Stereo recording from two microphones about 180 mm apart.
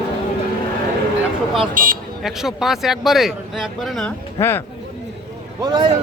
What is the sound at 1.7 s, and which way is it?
Speech, 50° right (ahead or behind).